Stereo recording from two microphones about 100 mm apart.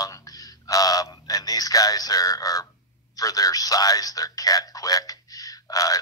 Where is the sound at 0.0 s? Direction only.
35° left (ahead or behind).